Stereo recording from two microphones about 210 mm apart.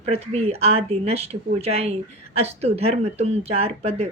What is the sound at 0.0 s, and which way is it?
Speech, 30° right (ahead or behind).